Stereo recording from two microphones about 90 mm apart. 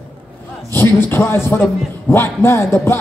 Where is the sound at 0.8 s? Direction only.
25° left (ahead or behind).